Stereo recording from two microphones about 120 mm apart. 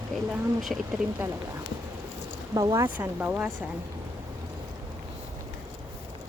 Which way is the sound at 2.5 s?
30° right (ahead or behind).